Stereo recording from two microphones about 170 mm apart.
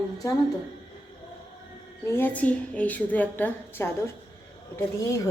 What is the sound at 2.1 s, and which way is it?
A woman's voice, 10° left (ahead or behind).